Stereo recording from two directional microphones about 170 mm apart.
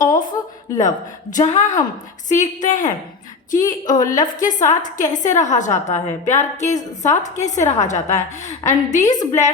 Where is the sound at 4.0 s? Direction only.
20° left (ahead or behind).